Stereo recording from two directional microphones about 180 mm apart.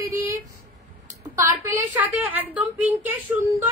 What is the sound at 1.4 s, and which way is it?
A woman's voice, 15° right (ahead or behind).